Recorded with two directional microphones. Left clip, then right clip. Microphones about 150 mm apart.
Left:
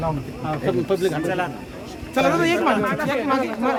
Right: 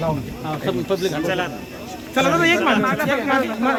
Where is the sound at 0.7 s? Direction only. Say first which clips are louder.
Left 1 dB; 40° left (ahead or behind).